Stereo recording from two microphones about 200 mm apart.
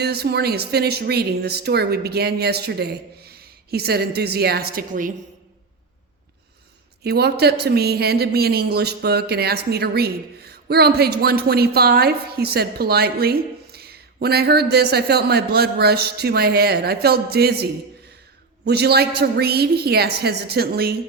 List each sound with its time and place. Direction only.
0.0 s a woman's voice: 55° right (ahead or behind)
7.0 s a woman's voice: 55° right (ahead or behind)